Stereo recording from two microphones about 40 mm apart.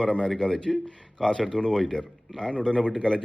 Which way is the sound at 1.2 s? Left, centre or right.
Centre.